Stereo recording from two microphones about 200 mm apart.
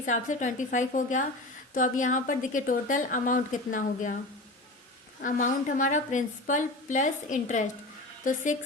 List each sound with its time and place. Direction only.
0.0 s a woman's voice: 40° left (ahead or behind)
5.2 s a woman's voice: 40° left (ahead or behind)